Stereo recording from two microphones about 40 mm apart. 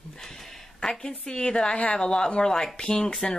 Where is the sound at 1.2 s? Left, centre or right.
Left.